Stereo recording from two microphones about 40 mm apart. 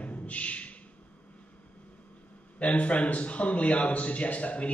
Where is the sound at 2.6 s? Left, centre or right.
Left.